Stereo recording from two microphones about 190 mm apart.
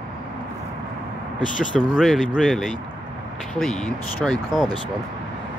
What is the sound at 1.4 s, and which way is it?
Speech, 45° left (ahead or behind).